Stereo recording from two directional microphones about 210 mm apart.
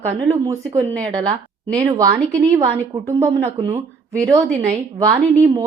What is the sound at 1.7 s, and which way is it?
A woman's voice, 15° right (ahead or behind).